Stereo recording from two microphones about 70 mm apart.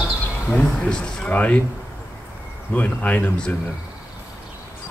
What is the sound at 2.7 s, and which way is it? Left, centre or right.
Speech, left.